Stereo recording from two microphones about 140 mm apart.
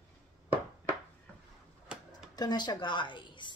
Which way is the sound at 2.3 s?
30° left (ahead or behind).